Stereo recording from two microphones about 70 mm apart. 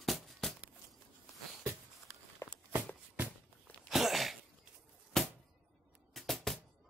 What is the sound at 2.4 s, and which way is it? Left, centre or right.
Walk, left.